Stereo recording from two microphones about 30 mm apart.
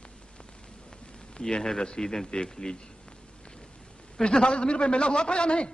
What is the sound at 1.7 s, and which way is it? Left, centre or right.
Speech, left.